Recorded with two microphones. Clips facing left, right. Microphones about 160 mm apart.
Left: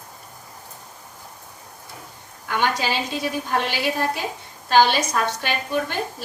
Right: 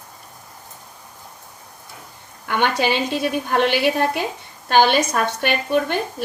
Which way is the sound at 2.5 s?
60° right (ahead or behind).